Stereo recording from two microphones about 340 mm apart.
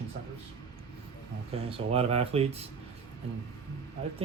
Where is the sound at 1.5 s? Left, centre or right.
Centre.